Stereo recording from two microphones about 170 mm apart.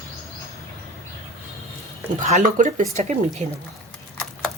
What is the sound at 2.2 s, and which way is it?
Speech, 45° right (ahead or behind).